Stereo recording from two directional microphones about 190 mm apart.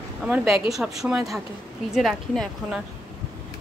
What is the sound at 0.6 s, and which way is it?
A woman's voice, centre (ahead or behind).